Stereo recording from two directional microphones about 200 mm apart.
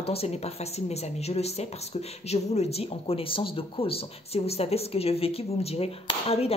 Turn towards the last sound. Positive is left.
turn(degrees=30)  # may be behind; listen again after turning